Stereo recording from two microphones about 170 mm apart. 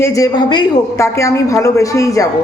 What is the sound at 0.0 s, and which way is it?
Speech, 20° left (ahead or behind).